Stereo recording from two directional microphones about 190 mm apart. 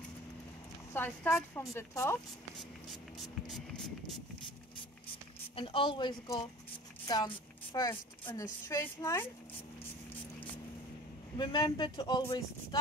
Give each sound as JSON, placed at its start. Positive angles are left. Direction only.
{"t": 0.9, "sound": "speech", "side_deg": 10}
{"t": 2.9, "sound": "spray", "side_deg": 0}
{"t": 5.6, "sound": "a woman's voice", "side_deg": 25}
{"t": 11.3, "sound": "speech", "side_deg": 25}